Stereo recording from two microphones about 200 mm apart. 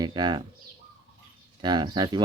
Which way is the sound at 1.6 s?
20° right (ahead or behind).